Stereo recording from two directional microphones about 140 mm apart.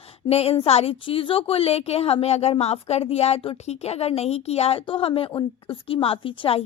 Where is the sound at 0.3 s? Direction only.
45° left (ahead or behind).